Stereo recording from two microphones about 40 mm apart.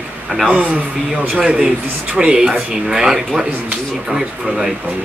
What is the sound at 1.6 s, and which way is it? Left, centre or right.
A man's voice, centre.